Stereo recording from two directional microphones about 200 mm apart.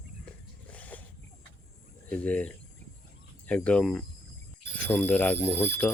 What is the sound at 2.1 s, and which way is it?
Speech, 5° left (ahead or behind).